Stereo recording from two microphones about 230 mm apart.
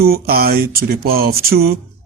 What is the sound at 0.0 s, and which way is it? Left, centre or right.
Speech, right.